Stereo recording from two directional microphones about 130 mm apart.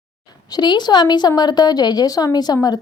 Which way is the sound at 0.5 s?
35° left (ahead or behind).